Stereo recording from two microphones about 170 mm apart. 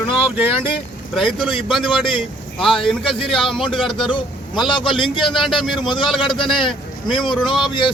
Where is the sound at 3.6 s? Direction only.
30° left (ahead or behind).